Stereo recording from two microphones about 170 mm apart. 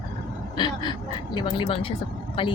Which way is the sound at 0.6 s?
25° left (ahead or behind).